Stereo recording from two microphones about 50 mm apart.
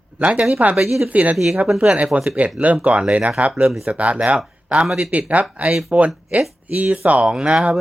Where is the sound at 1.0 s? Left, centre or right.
Right.